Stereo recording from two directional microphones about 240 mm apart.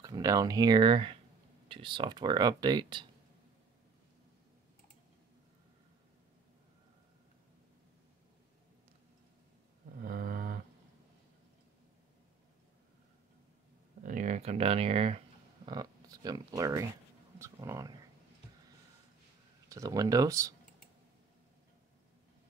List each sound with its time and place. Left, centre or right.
0.0 s speech: centre
10.0 s a sound: right
14.0 s speech: right; by 17.9 s centre
19.7 s speech: centre